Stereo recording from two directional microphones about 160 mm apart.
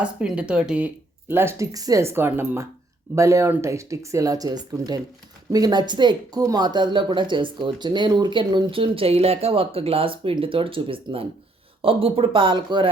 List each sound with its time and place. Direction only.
0.0 s speech: 5° right (ahead or behind); by 12.9 s 30° right (ahead or behind)